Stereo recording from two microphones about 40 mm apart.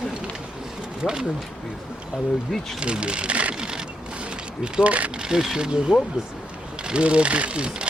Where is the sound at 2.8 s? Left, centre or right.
Right.